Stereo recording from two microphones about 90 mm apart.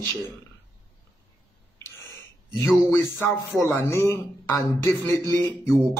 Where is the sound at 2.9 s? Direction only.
30° left (ahead or behind).